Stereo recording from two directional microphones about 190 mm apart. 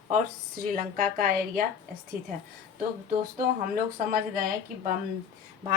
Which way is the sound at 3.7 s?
50° right (ahead or behind).